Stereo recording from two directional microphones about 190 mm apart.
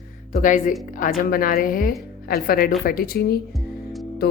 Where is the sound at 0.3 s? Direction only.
45° left (ahead or behind).